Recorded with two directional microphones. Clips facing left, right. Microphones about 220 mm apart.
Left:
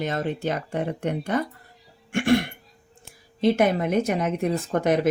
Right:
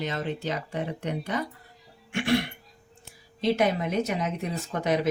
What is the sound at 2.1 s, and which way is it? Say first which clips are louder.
Cough: left 5 dB; 50° left (ahead or behind).